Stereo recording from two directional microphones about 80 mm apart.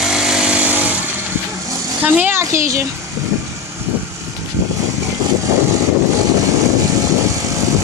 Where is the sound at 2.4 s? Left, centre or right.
Right.